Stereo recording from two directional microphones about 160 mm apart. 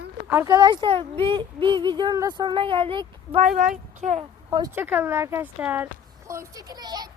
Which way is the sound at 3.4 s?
55° right (ahead or behind).